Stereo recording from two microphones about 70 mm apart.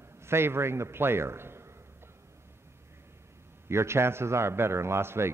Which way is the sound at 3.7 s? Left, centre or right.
Right.